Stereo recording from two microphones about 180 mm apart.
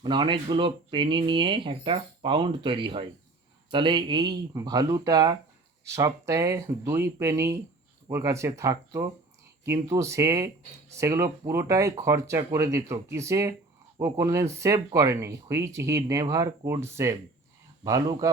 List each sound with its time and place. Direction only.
0.0 s speech: 25° right (ahead or behind)